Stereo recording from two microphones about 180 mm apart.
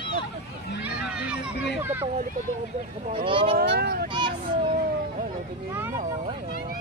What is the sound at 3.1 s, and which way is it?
Speech, 30° right (ahead or behind).